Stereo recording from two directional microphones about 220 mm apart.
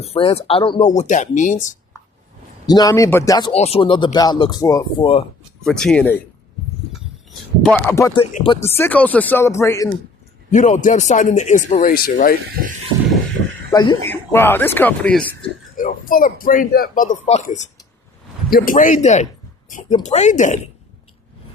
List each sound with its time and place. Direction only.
0.0 s speech: 25° left (ahead or behind)
2.6 s speech: 15° left (ahead or behind)
5.6 s speech: centre (ahead or behind)
7.6 s speech: 5° left (ahead or behind)
8.2 s speech: 30° left (ahead or behind)
8.6 s speech: 10° left (ahead or behind)
10.5 s speech: 35° left (ahead or behind)
13.7 s speech: 20° left (ahead or behind)
15.8 s speech: 40° left (ahead or behind)